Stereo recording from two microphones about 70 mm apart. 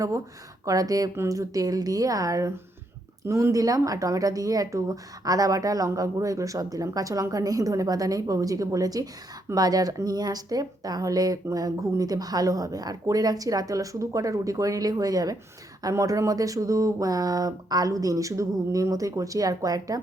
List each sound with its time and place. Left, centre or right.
0.6 s a woman's voice: right